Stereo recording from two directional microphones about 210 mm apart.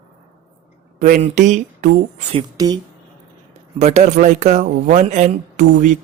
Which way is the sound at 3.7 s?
30° right (ahead or behind).